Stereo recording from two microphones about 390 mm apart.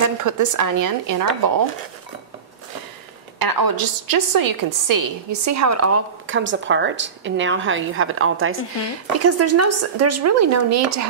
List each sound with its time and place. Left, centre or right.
0.2 s a woman's voice: right
3.3 s a woman's voice: right